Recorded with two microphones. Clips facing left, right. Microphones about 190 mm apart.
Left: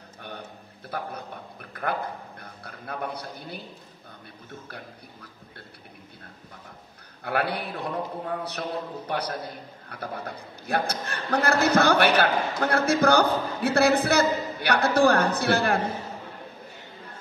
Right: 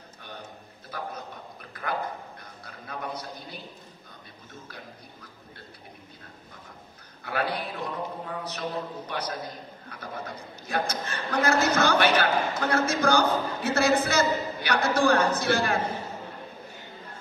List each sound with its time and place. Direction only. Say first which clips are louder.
0.8 s a man's voice: left 3 dB; 60° left (ahead or behind)
7.2 s a man's voice: left 2 dB; 60° left (ahead or behind)